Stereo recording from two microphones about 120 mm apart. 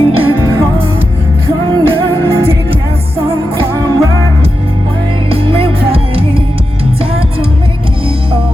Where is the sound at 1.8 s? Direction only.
40° right (ahead or behind).